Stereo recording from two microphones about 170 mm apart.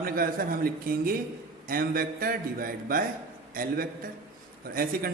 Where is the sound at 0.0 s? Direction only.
60° right (ahead or behind).